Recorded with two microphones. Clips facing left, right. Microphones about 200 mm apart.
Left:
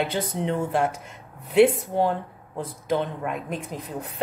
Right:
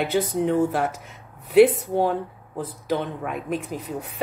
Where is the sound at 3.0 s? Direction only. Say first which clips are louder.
Left 1 dB; centre (ahead or behind).